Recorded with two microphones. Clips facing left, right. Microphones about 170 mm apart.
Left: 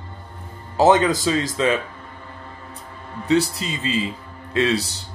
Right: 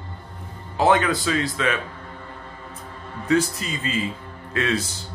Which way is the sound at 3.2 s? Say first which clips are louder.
Left 2 dB; 25° left (ahead or behind).